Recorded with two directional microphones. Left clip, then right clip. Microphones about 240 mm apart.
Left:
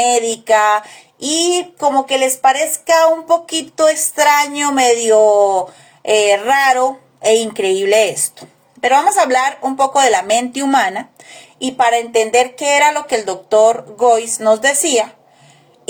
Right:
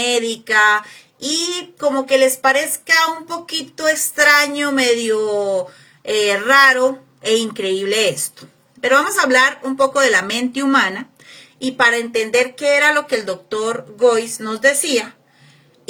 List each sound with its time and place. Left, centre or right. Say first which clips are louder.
0.0 s speech: left 4 dB; centre